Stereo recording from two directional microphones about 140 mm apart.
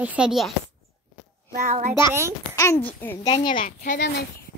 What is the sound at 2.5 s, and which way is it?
Speech, 20° left (ahead or behind).